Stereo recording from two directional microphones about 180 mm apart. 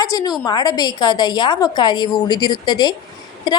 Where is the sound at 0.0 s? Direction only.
20° left (ahead or behind).